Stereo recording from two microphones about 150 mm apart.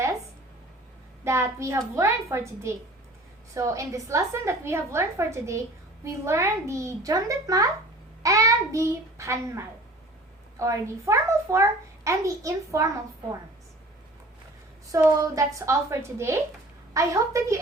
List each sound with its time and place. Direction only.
1.2 s a child's voice: 20° right (ahead or behind)
14.9 s a child's voice: 20° right (ahead or behind)